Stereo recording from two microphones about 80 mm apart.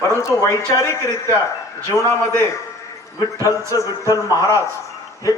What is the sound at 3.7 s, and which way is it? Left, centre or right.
Speech, left.